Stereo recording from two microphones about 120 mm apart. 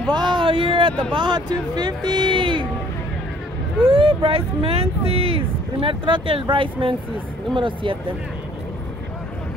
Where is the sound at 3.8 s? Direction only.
45° right (ahead or behind).